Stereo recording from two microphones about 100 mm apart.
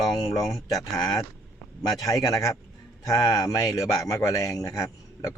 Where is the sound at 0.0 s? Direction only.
35° left (ahead or behind).